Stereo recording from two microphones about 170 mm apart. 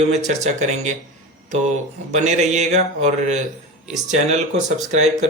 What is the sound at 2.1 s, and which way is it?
Speech, 45° right (ahead or behind).